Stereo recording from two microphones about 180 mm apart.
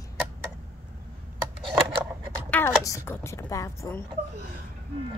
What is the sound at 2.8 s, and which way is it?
A child's voice, 15° left (ahead or behind).